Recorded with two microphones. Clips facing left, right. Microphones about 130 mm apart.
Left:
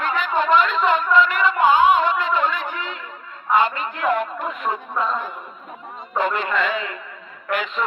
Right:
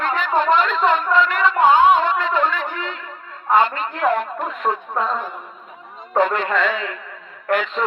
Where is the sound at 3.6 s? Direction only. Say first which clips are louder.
Right 2 dB; 10° left (ahead or behind).